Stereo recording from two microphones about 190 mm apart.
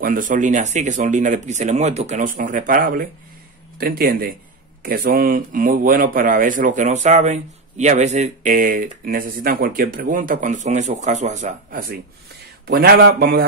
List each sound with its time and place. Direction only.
0.0 s speech: 45° right (ahead or behind)
12.6 s speech: 55° right (ahead or behind)